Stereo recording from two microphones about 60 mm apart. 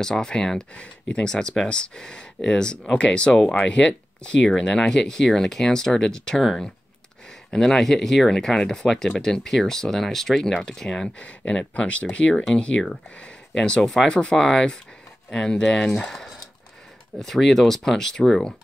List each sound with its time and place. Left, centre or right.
0.0 s speech: centre
7.5 s speech: centre